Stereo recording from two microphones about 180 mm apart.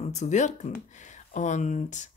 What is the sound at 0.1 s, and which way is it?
A woman's voice, 40° left (ahead or behind).